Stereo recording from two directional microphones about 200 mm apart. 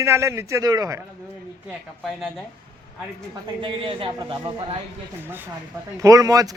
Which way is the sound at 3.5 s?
25° right (ahead or behind).